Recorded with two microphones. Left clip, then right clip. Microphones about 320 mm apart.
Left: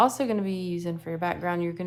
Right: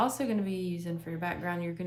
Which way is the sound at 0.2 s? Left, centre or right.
Centre.